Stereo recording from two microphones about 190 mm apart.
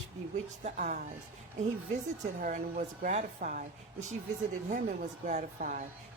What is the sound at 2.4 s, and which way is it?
Speech, 40° right (ahead or behind).